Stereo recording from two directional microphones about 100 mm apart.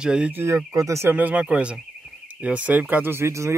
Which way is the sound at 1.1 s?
15° right (ahead or behind).